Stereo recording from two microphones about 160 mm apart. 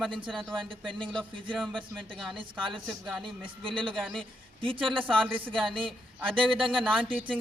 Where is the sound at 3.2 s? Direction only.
30° right (ahead or behind).